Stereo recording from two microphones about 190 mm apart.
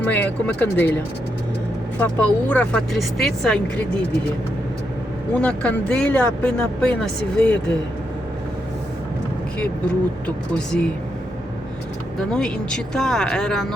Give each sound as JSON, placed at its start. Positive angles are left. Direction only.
{"t": 0.0, "sound": "speech", "side_deg": 10}
{"t": 2.0, "sound": "speech", "side_deg": 10}
{"t": 5.3, "sound": "speech", "side_deg": 5}
{"t": 9.6, "sound": "speech", "side_deg": 5}
{"t": 12.3, "sound": "speech", "side_deg": 5}